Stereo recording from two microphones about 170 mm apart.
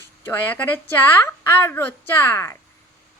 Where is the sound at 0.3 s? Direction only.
10° left (ahead or behind).